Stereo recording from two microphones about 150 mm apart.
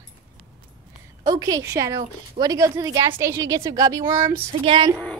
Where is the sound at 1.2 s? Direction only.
25° right (ahead or behind).